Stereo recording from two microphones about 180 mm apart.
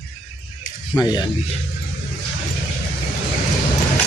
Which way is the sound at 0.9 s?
25° left (ahead or behind).